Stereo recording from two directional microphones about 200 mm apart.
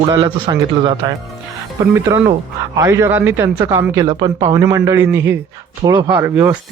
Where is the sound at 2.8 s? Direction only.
10° right (ahead or behind).